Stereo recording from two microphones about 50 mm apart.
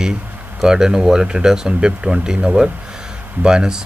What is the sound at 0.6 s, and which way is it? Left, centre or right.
Speech, centre.